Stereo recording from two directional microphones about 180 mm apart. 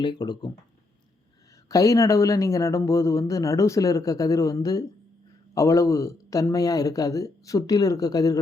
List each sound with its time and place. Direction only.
0.0 s speech: 25° left (ahead or behind)
1.7 s speech: 20° left (ahead or behind)